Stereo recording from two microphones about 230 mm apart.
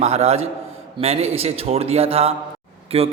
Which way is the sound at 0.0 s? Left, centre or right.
Right.